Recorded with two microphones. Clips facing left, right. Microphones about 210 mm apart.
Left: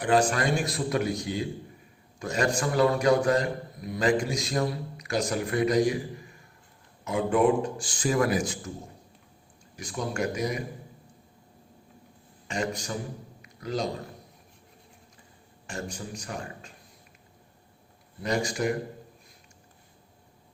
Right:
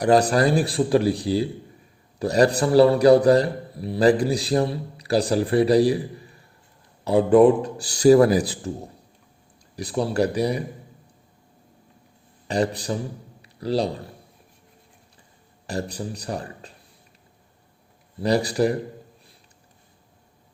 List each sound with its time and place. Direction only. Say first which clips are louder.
0.0 s a man's voice: right 6 dB; 40° right (ahead or behind)
12.5 s a man's voice: right 7 dB; 35° right (ahead or behind)
15.6 s a man's voice: right 7 dB; 35° right (ahead or behind)
18.2 s a man's voice: right 7 dB; 35° right (ahead or behind)